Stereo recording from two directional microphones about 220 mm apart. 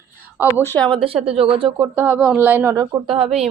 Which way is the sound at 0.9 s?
25° right (ahead or behind).